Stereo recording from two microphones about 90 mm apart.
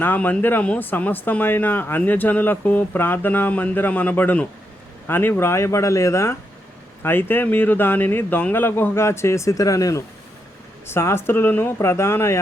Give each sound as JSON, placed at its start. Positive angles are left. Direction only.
{"t": 0.0, "sound": "speech", "side_deg": 20}
{"t": 10.8, "sound": "speech", "side_deg": 30}